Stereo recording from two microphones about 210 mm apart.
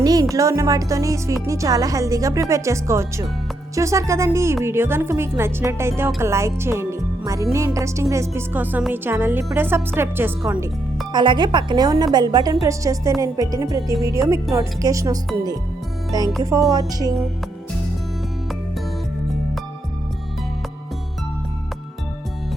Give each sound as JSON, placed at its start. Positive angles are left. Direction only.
{"t": 0.0, "sound": "a woman's voice", "side_deg": -15}
{"t": 11.1, "sound": "a woman's voice", "side_deg": -20}
{"t": 16.4, "sound": "a woman's voice", "side_deg": -15}